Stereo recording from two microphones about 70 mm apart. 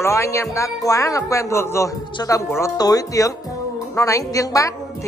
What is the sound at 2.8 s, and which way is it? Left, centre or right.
A woman's voice, left.